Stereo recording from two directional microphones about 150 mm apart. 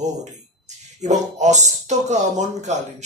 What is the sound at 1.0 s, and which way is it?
Speech, 50° right (ahead or behind).